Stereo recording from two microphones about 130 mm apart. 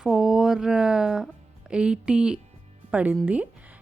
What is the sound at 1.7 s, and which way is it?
A woman's voice, 5° right (ahead or behind).